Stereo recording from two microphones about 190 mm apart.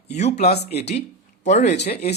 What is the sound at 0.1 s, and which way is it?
Speech, 35° left (ahead or behind).